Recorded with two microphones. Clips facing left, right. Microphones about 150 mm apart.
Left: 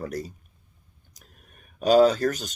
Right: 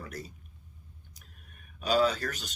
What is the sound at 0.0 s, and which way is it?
Speech, 40° left (ahead or behind).